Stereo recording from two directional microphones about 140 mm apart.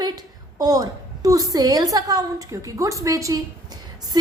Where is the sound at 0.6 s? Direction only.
25° right (ahead or behind).